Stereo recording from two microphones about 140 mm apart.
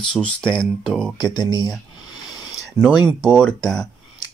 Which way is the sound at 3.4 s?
5° left (ahead or behind).